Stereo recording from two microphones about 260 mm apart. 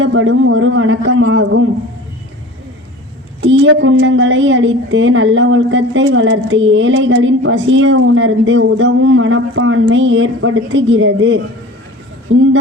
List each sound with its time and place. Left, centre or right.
0.0 s a woman's voice: right
3.4 s a woman's voice: right